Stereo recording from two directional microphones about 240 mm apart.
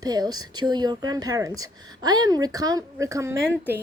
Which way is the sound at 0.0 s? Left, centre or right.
Centre.